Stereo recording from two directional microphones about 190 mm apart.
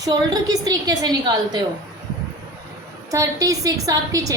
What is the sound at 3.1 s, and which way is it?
A woman's voice, 15° right (ahead or behind).